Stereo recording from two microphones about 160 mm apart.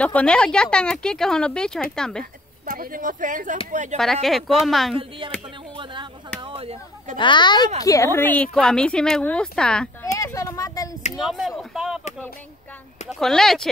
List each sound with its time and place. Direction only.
0.0 s speech: 5° left (ahead or behind)
2.6 s speech: 65° right (ahead or behind)
3.9 s speech: centre (ahead or behind)
5.2 s speech: 30° right (ahead or behind)
6.4 s a sound: 35° right (ahead or behind)
7.2 s speech: 30° left (ahead or behind); by 9.8 s 5° left (ahead or behind)
10.1 s a sound: 20° left (ahead or behind)
11.1 s a sound: centre (ahead or behind)
13.1 s speech: centre (ahead or behind)